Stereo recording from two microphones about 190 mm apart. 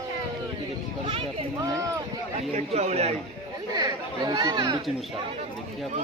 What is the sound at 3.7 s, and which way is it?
Chatter, 20° right (ahead or behind).